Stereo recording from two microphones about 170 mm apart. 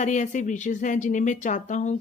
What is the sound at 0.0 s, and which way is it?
A woman's voice, 45° left (ahead or behind).